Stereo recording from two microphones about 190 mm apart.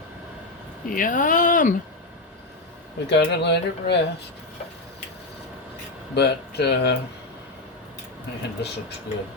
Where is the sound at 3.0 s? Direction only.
65° left (ahead or behind).